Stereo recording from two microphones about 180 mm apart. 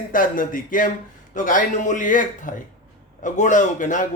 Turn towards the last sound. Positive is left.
turn(degrees=45)  # may be behind; listen again after turning